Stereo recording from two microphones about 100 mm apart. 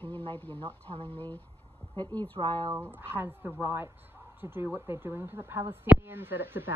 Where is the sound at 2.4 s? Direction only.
45° right (ahead or behind).